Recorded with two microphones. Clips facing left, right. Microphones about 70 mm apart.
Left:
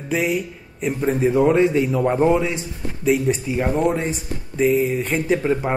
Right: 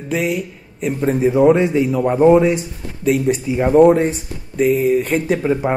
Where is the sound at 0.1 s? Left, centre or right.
Centre.